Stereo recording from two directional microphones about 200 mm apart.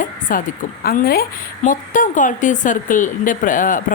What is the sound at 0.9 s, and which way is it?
A woman's voice, 50° left (ahead or behind).